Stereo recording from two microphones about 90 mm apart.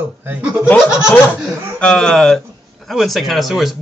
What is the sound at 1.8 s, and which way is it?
Speech, 10° left (ahead or behind).